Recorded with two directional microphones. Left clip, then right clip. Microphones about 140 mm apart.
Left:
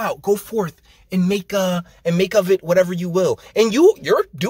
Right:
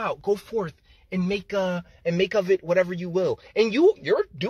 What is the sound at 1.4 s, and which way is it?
Speech, 5° left (ahead or behind).